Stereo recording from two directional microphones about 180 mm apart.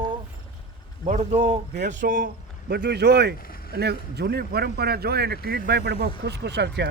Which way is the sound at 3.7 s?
65° right (ahead or behind).